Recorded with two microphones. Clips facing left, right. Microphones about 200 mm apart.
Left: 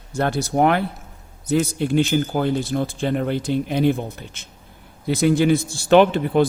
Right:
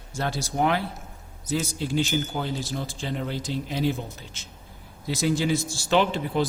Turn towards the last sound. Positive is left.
turn(degrees=55)  # may be behind; listen again after turning